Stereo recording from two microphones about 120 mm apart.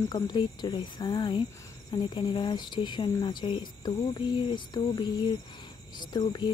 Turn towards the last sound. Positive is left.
turn(degrees=35)  # may be behind; listen again after turning